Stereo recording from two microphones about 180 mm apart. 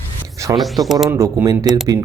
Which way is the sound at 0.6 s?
Centre (ahead or behind).